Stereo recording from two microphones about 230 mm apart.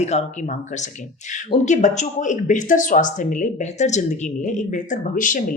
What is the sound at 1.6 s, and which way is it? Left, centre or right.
Speech, left.